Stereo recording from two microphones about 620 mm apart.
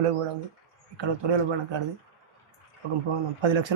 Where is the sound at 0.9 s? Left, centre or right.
Right.